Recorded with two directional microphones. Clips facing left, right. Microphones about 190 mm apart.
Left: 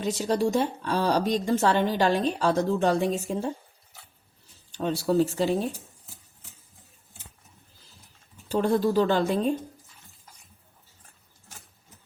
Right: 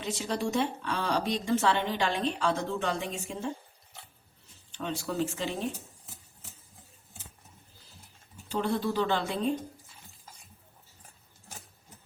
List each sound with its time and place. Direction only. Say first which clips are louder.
0.0 s a woman's voice: left 7 dB; 40° left (ahead or behind)
4.7 s a woman's voice: left 9 dB; 35° left (ahead or behind)
8.4 s speech: left 6 dB; 45° left (ahead or behind)